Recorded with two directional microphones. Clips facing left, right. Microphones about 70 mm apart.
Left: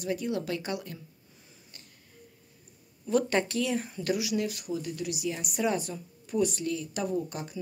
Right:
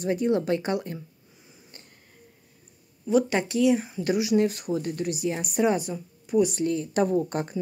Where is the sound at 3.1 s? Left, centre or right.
Centre.